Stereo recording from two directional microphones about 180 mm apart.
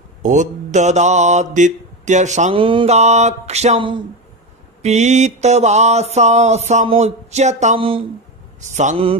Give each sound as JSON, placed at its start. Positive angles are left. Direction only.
{"t": 0.2, "sound": "mantra", "side_deg": -40}
{"t": 8.5, "sound": "mantra", "side_deg": -40}